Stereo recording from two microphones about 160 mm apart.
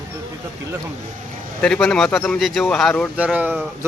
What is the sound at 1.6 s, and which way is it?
Speech, 5° left (ahead or behind).